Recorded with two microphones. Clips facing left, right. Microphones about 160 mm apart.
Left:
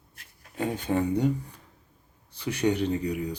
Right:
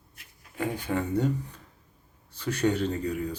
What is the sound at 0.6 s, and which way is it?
Speech, 20° left (ahead or behind).